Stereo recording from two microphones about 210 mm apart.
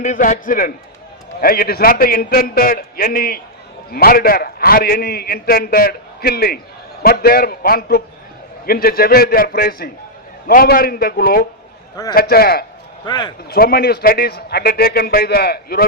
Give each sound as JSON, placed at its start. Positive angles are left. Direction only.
{"t": 0.0, "sound": "a man's voice", "side_deg": 35}
{"t": 13.1, "sound": "speech", "side_deg": 20}
{"t": 13.5, "sound": "a man's voice", "side_deg": 45}